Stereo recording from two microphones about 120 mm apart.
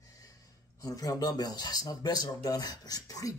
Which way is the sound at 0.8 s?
30° left (ahead or behind).